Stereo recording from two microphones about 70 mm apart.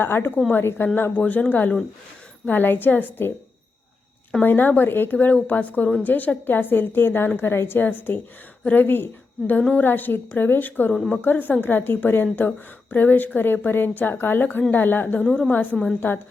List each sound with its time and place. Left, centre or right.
0.0 s a woman's voice: left
4.4 s a woman's voice: left
10.9 s a woman's voice: centre
11.2 s a woman's voice: left
15.3 s a woman's voice: centre
16.0 s a woman's voice: left